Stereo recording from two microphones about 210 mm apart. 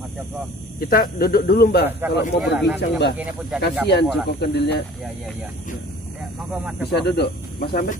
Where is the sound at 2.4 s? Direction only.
5° right (ahead or behind).